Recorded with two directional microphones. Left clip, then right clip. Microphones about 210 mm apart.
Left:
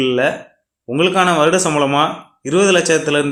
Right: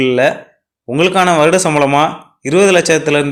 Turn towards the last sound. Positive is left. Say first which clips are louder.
# right 3 dB
turn(degrees=-30)  # may be behind; listen again after turning